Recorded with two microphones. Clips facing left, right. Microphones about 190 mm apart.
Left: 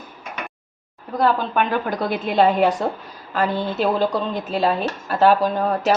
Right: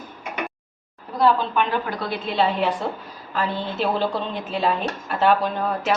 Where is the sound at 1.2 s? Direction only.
45° left (ahead or behind).